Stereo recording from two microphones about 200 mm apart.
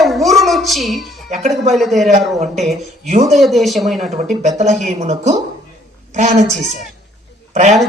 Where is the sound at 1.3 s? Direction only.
35° right (ahead or behind).